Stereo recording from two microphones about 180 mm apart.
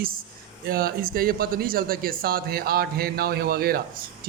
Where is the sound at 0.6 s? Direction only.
55° right (ahead or behind).